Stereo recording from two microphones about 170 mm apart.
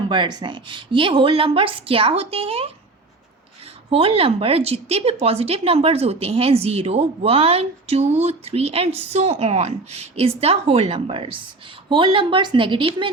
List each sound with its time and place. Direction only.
0.1 s a woman's voice: 25° right (ahead or behind)
3.8 s a woman's voice: 35° right (ahead or behind)